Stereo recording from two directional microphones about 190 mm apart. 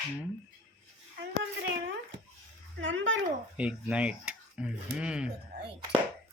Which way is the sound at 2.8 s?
80° right.